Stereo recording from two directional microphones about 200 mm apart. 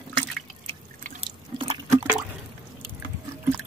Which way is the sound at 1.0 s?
30° right (ahead or behind).